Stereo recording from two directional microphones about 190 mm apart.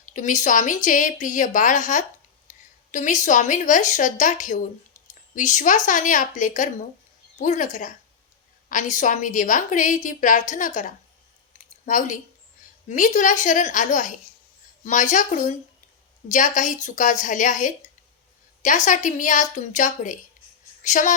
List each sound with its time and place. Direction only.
0.0 s a woman's voice: 40° left (ahead or behind)
4.9 s a sound: 40° left (ahead or behind)
5.3 s a woman's voice: 40° left (ahead or behind)